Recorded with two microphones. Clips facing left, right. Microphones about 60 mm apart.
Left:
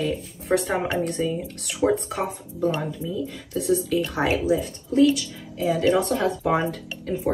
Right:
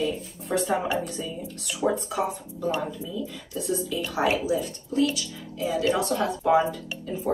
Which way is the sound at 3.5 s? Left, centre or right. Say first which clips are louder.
Left 6 dB; left.